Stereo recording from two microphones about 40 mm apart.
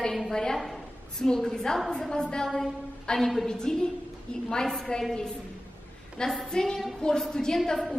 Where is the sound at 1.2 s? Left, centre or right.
Centre.